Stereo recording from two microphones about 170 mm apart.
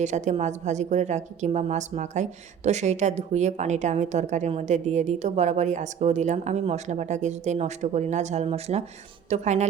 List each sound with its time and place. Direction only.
0.0 s a woman's voice: 45° right (ahead or behind)